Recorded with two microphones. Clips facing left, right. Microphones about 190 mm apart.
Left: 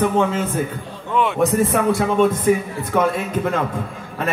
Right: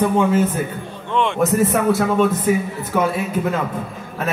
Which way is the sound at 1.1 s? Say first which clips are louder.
Even; 5° left (ahead or behind).